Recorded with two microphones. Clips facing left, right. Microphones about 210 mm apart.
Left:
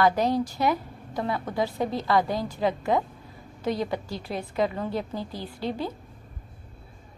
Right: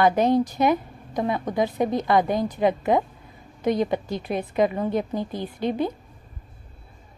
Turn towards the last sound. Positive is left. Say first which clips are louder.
# right 5 dB
turn(degrees=-20)  # may be behind; listen again after turning